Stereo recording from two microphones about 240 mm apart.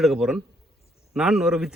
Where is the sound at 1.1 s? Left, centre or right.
Centre.